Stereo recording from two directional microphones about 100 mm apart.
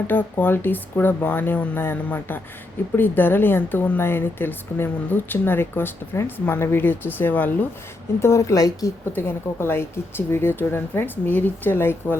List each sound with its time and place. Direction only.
0.1 s speech: 20° left (ahead or behind)
8.2 s speech: 30° left (ahead or behind)
9.1 s speech: 25° left (ahead or behind)